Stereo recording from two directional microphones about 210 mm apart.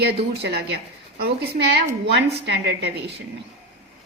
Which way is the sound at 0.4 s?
55° right (ahead or behind).